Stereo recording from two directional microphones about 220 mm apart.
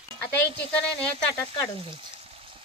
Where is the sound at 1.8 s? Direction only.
25° right (ahead or behind).